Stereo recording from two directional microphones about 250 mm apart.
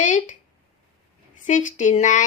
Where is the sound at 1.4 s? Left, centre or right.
Left.